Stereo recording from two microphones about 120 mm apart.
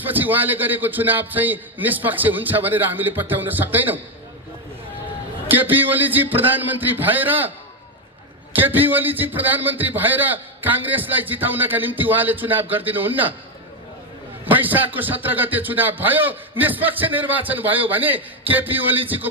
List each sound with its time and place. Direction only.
0.0 s a man's voice: 15° right (ahead or behind)
5.5 s a man's voice: 15° right (ahead or behind)
8.5 s a man's voice: 15° right (ahead or behind)
14.4 s a man's voice: 15° right (ahead or behind)